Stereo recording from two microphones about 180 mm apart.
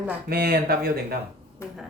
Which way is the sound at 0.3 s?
55° right (ahead or behind).